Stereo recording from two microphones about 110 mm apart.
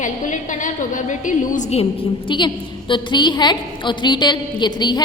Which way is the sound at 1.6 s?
70° left (ahead or behind).